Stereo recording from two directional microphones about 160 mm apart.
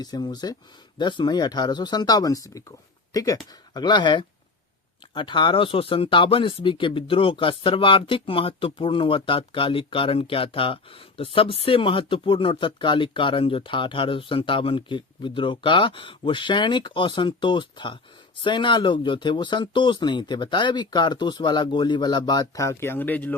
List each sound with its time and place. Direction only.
0.0 s speech: 25° left (ahead or behind)